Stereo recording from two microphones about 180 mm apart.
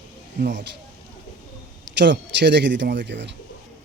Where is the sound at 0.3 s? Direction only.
65° right (ahead or behind).